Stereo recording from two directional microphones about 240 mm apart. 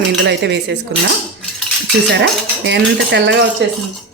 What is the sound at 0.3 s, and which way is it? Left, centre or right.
Speech, right.